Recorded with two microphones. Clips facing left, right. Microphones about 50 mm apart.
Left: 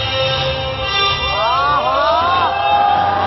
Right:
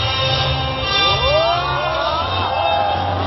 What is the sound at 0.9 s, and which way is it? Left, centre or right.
Music, centre.